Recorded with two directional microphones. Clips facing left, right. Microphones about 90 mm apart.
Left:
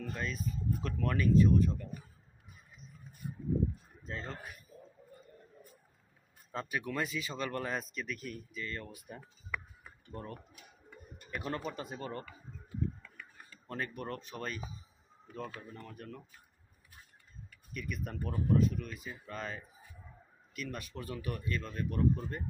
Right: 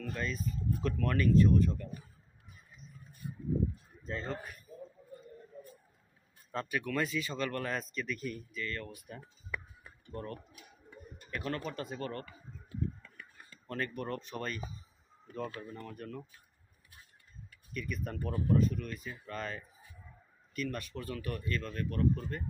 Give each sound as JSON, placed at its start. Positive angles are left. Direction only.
{"t": 0.0, "sound": "speech", "side_deg": 10}
{"t": 3.2, "sound": "a sound", "side_deg": 30}
{"t": 4.0, "sound": "speech", "side_deg": 0}
{"t": 6.5, "sound": "speech", "side_deg": 10}
{"t": 8.5, "sound": "speech", "side_deg": 15}
{"t": 13.7, "sound": "speech", "side_deg": 5}
{"t": 17.7, "sound": "speech", "side_deg": 5}